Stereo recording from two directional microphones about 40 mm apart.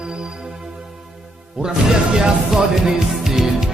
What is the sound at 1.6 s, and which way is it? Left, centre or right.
Music, centre.